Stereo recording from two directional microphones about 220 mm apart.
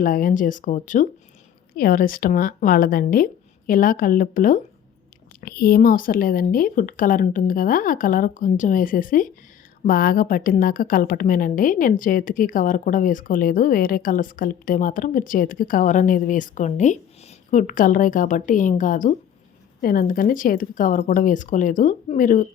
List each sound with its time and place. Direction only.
0.0 s a woman's voice: 40° left (ahead or behind)